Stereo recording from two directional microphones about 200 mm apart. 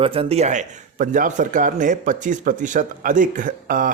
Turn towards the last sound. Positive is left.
turn(degrees=-45)  # may be behind; listen again after turning